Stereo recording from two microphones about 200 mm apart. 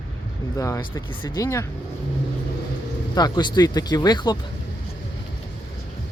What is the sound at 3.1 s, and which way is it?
Speech, 20° left (ahead or behind).